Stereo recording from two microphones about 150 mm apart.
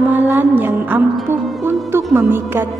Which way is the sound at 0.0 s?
10° right (ahead or behind).